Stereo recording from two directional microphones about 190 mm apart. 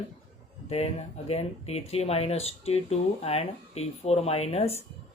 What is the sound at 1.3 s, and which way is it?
Speech, 35° left (ahead or behind).